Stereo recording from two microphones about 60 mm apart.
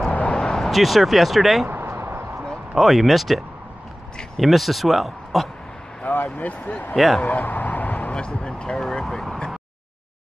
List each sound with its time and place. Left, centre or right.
0.3 s speech: centre
1.7 s a sound: right
2.7 s speech: centre
6.0 s speech: left; by 9.2 s centre